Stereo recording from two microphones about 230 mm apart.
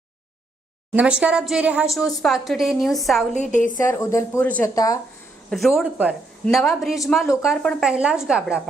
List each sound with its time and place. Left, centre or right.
0.9 s a woman's voice: centre
3.5 s a woman's voice: left
3.8 s speech: centre
5.5 s a woman's voice: centre